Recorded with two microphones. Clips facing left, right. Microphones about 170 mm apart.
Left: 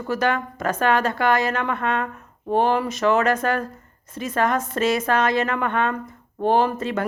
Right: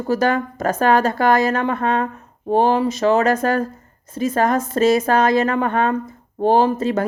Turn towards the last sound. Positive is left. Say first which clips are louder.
# right 4 dB
turn(degrees=-40)  # may be behind; listen again after turning